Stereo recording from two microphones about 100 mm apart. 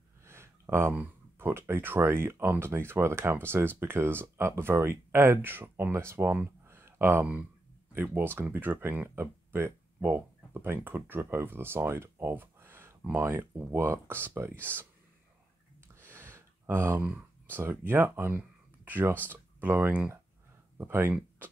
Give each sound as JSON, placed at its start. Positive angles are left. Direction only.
{"t": 0.2, "sound": "speech", "side_deg": -25}
{"t": 14.7, "sound": "speech", "side_deg": 15}
{"t": 15.9, "sound": "a sound", "side_deg": -25}
{"t": 18.9, "sound": "speech", "side_deg": -20}